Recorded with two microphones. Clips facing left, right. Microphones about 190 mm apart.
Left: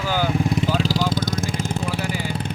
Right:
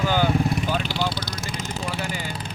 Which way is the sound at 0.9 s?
45° left (ahead or behind).